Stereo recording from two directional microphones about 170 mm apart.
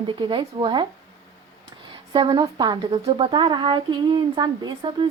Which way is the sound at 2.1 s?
30° right (ahead or behind).